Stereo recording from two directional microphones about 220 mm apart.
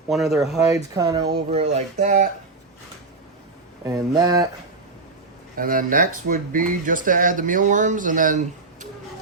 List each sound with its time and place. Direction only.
0.1 s speech: centre (ahead or behind)
0.7 s speech: 15° right (ahead or behind)
1.5 s speech: 30° right (ahead or behind)
3.8 s speech: 15° right (ahead or behind)
5.5 s speech: 40° right (ahead or behind)